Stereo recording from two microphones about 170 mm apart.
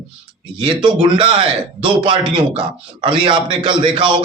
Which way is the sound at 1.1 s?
30° right (ahead or behind).